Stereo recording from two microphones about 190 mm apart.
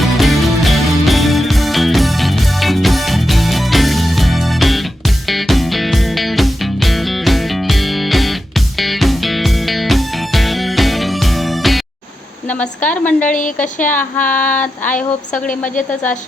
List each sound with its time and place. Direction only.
0.0 s music: centre (ahead or behind)
12.5 s a sound: 10° left (ahead or behind)
13.2 s speech: 40° left (ahead or behind)
13.8 s child singing: 10° left (ahead or behind)
14.9 s a woman's voice: 45° left (ahead or behind)